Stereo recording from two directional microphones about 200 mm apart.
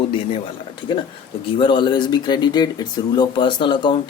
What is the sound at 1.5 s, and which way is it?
A man's voice, 25° left (ahead or behind).